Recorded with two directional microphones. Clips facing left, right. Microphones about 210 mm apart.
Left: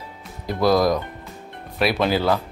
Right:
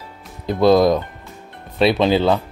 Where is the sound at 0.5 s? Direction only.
25° right (ahead or behind).